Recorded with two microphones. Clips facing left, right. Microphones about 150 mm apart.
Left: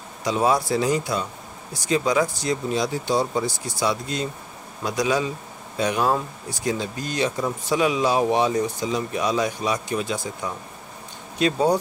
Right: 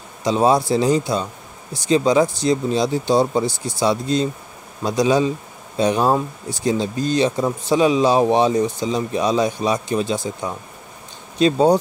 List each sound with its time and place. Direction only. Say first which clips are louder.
0.2 s speech: right 5 dB; 25° right (ahead or behind)